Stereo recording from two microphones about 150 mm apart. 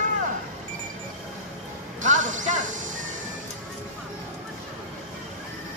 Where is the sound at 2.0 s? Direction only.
55° right (ahead or behind).